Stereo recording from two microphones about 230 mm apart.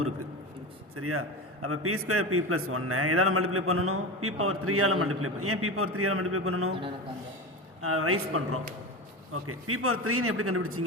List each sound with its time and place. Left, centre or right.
0.9 s a man's voice: right
6.7 s a man's voice: right
7.8 s a man's voice: right